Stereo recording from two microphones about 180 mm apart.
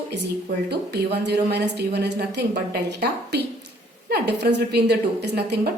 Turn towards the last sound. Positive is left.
turn(degrees=-65)  # may be behind; listen again after turning